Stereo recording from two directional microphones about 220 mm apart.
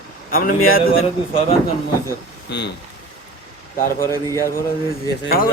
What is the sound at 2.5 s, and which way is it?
Speech, 50° left (ahead or behind).